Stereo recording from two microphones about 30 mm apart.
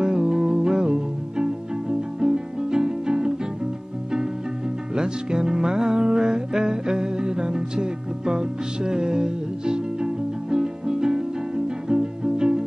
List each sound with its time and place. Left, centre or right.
0.0 s music: right
4.9 s music: right
6.5 s music: centre
7.2 s music: right